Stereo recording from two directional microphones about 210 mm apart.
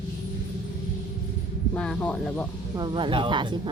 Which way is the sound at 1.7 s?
5° left (ahead or behind).